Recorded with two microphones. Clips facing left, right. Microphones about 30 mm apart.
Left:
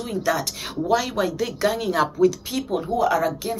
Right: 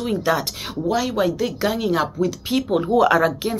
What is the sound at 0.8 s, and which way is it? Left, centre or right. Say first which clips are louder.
A woman's voice: right 1 dB; centre.